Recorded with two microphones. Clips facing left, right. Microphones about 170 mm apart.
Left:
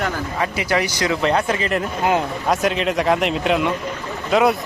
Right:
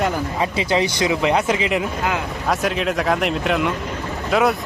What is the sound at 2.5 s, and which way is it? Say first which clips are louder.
A man's voice: left 1 dB; centre (ahead or behind).